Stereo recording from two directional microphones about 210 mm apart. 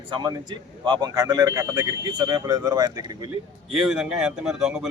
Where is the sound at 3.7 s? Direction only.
5° right (ahead or behind).